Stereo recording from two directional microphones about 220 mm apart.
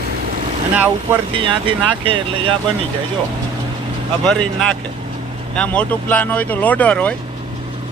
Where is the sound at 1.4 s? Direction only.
25° right (ahead or behind).